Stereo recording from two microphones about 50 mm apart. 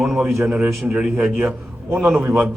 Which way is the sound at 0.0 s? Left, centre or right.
Centre.